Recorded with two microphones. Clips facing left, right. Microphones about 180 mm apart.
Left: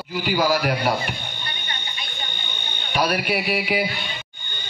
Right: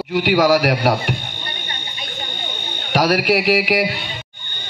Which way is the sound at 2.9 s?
85° right.